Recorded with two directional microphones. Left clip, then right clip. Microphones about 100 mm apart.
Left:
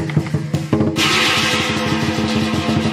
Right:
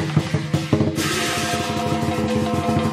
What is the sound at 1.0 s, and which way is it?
Music, 5° left (ahead or behind).